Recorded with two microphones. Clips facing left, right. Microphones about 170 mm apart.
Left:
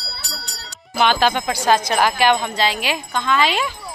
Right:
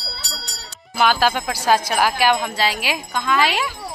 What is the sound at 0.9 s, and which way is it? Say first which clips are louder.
Speech: left 1 dB; 5° right (ahead or behind).